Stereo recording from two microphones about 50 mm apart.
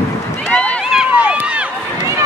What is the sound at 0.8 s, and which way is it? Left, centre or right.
Run, centre.